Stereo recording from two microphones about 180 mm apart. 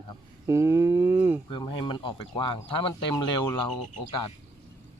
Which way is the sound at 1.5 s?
25° left (ahead or behind).